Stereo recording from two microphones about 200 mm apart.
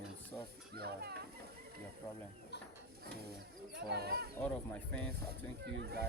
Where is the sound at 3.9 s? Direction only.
50° right (ahead or behind).